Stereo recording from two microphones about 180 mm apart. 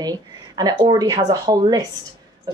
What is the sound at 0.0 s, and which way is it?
Speech, 20° right (ahead or behind).